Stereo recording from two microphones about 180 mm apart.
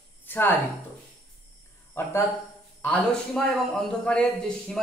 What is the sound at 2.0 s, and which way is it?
A man's voice, 15° left (ahead or behind).